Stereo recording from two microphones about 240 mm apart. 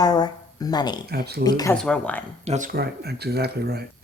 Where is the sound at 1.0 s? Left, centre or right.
Right.